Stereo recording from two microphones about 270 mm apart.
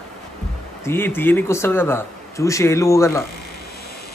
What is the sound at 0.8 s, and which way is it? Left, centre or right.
Speech, centre.